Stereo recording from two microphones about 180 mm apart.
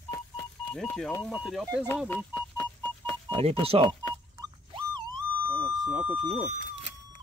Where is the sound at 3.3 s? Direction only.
30° right (ahead or behind).